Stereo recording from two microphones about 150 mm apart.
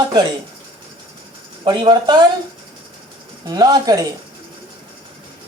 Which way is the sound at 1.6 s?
30° right (ahead or behind).